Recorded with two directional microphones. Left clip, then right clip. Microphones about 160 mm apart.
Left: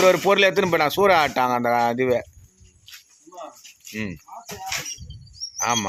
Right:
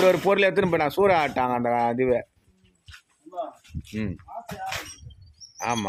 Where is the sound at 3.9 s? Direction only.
10° right (ahead or behind).